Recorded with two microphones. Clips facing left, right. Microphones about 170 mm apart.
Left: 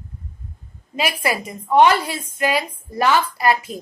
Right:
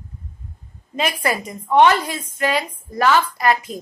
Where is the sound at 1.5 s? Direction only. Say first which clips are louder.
Even; 5° left (ahead or behind).